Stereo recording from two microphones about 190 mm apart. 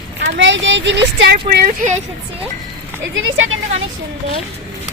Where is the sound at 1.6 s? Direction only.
45° right (ahead or behind).